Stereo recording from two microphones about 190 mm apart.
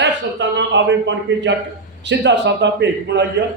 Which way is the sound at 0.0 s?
70° right (ahead or behind).